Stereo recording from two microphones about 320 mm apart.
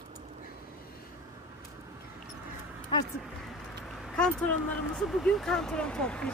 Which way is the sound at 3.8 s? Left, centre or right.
Centre.